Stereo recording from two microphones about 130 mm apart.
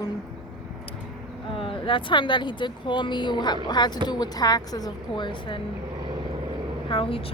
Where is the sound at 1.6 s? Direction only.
40° left (ahead or behind).